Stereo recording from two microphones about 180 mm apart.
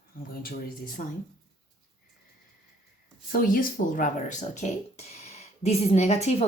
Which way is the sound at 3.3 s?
50° left (ahead or behind).